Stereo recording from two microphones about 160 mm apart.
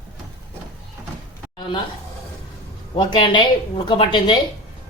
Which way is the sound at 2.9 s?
30° left (ahead or behind).